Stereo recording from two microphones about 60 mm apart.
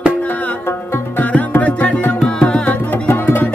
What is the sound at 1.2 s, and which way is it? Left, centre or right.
Music, left.